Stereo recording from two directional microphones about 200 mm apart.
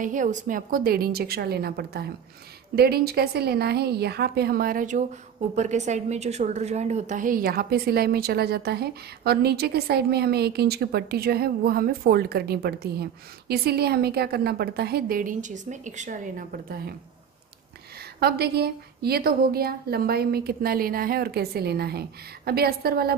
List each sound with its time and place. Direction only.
0.0 s a woman's voice: 40° right (ahead or behind)
18.2 s a woman's voice: 50° right (ahead or behind)